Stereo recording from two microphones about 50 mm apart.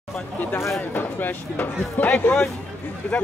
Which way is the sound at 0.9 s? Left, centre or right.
Left.